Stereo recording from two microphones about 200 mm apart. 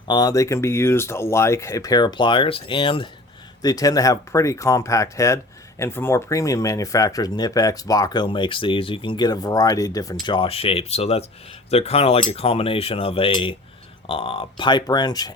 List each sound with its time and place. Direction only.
0.1 s speech: 20° left (ahead or behind)